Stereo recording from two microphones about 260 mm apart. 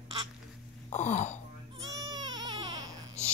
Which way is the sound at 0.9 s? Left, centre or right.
Left.